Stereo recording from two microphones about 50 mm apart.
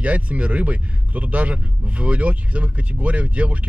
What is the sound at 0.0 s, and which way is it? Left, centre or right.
Speech, right.